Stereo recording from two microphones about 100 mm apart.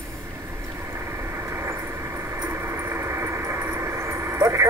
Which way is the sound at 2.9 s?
25° right (ahead or behind).